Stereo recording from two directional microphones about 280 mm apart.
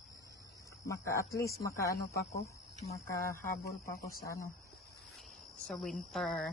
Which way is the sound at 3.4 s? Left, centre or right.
Left.